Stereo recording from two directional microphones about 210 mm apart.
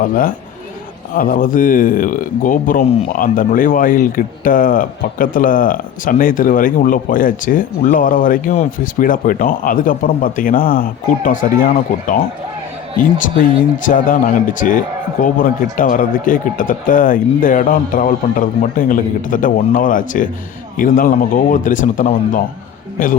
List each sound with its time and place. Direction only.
0.0 s speech: 40° left (ahead or behind)
15.2 s speech: 40° left (ahead or behind)